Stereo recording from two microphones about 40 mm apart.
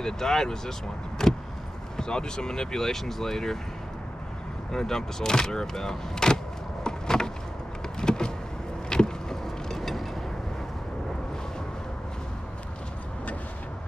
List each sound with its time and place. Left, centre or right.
0.0 s speech: centre
4.7 s speech: centre
8.0 s vehicle: centre